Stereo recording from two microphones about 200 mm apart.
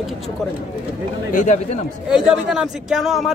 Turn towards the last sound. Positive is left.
turn(degrees=0)  # may be behind; listen again after turning